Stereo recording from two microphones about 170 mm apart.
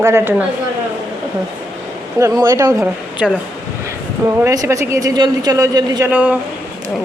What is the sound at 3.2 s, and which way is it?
Speech, centre (ahead or behind).